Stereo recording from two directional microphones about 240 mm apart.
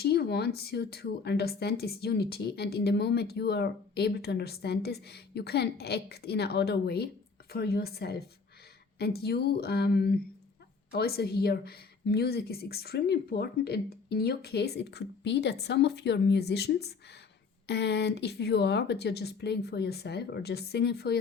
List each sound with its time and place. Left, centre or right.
0.0 s speech: left